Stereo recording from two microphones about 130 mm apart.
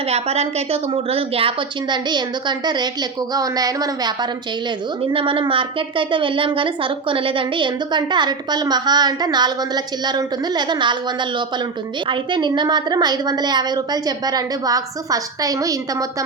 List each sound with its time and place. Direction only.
0.1 s a woman's voice: 50° right (ahead or behind); by 4.3 s 30° right (ahead or behind)
5.1 s a woman's voice: 40° right (ahead or behind)